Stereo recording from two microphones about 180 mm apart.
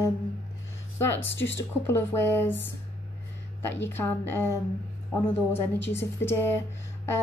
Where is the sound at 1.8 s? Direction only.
15° left (ahead or behind).